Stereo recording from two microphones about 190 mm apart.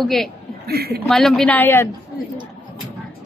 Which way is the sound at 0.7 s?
55° right (ahead or behind).